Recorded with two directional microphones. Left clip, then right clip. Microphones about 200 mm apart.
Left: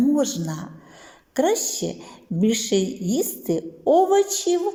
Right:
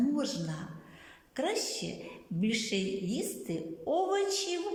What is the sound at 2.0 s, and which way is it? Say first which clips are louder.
A woman's voice: left 12 dB; 40° left (ahead or behind).